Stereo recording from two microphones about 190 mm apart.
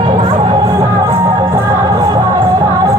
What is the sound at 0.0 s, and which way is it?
Music, 20° right (ahead or behind).